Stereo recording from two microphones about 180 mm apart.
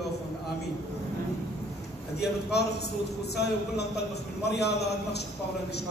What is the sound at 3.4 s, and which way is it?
A man's voice, 65° left (ahead or behind).